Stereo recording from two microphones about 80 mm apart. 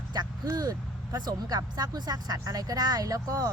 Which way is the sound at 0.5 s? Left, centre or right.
Right.